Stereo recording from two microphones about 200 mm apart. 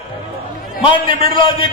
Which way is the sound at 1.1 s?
45° right (ahead or behind).